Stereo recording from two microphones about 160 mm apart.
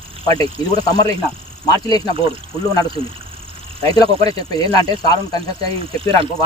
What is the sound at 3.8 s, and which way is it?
Speech, 25° left (ahead or behind).